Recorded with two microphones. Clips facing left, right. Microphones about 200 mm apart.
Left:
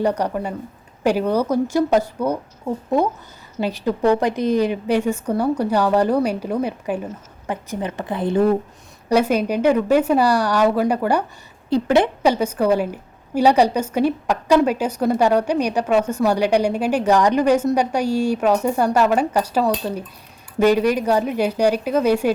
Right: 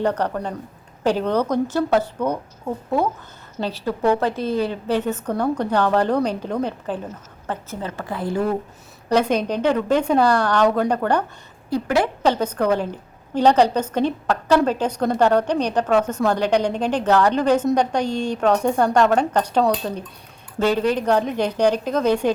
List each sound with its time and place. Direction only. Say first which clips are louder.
0.0 s a woman's voice: left 1 dB; 10° left (ahead or behind)
9.0 s a woman's voice: left 2 dB; 10° left (ahead or behind)
11.7 s a woman's voice: left 4 dB; 20° left (ahead or behind)